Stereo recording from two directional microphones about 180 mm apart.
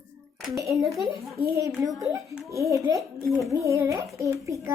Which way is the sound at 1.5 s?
15° right (ahead or behind).